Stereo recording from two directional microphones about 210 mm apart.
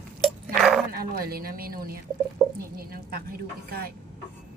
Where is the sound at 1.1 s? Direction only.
45° right (ahead or behind).